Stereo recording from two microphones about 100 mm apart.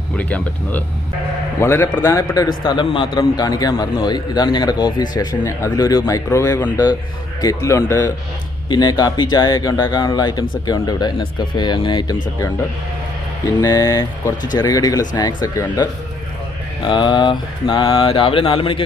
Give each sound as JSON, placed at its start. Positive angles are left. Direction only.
{"t": 0.2, "sound": "speech", "side_deg": 15}
{"t": 2.4, "sound": "speech", "side_deg": 50}
{"t": 3.3, "sound": "speech", "side_deg": 40}
{"t": 8.6, "sound": "speech", "side_deg": 45}
{"t": 13.6, "sound": "speech", "side_deg": 40}
{"t": 16.8, "sound": "mantra", "side_deg": 50}